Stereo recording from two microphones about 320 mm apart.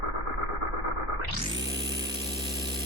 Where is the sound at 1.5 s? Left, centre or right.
Centre.